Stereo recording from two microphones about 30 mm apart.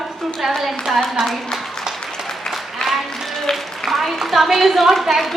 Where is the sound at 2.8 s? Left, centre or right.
Left.